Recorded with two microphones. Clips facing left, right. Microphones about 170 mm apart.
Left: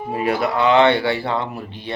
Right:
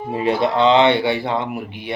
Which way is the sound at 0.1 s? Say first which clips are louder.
Right 2 dB; 25° right (ahead or behind).